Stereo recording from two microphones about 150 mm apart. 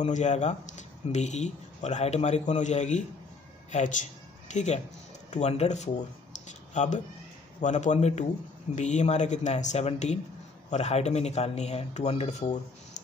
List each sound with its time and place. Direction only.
0.0 s speech: 50° left (ahead or behind)
6.3 s a sound: 50° left (ahead or behind)
7.6 s speech: 55° left (ahead or behind)